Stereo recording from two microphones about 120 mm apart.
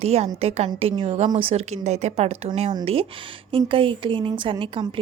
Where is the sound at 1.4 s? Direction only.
65° right (ahead or behind).